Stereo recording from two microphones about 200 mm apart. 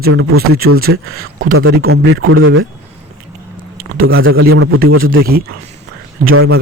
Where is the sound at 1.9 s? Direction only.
75° right (ahead or behind).